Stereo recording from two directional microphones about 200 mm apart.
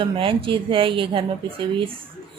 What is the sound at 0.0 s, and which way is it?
Speech, 25° right (ahead or behind).